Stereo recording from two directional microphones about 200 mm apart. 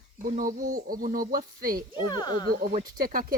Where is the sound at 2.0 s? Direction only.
20° left (ahead or behind).